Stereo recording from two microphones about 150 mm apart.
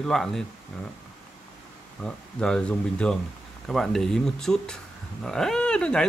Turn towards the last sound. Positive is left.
turn(degrees=5)  # may be behind; listen again after turning